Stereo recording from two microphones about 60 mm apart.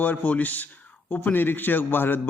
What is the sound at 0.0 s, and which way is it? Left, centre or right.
A man's voice, left.